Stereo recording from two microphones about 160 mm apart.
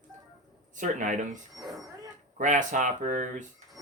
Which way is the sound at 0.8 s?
50° right (ahead or behind).